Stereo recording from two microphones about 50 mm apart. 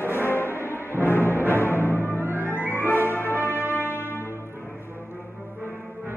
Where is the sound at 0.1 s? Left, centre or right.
Left.